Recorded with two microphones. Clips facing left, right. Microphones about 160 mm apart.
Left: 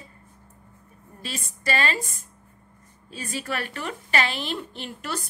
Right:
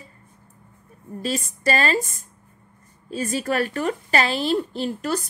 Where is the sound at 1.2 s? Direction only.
40° right (ahead or behind).